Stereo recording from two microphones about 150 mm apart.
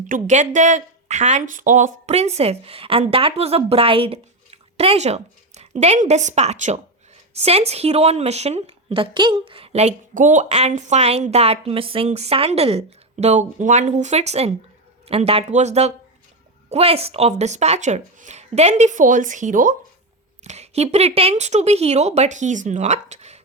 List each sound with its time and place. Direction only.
0.1 s a woman's voice: 55° right (ahead or behind)
20.4 s a woman's voice: 45° right (ahead or behind)